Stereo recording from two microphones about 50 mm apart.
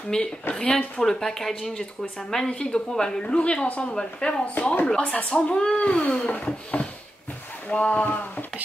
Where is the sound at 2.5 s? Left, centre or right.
Left.